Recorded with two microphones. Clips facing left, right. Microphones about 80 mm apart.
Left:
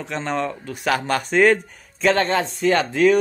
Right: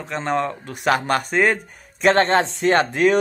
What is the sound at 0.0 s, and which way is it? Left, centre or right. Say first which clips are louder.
Speech: right 2 dB; right.